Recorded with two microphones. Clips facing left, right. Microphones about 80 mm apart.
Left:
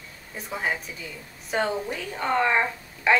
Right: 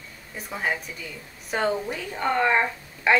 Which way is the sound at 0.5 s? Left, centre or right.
Centre.